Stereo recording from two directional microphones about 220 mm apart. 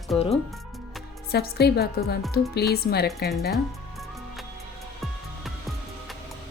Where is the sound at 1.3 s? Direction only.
45° left (ahead or behind).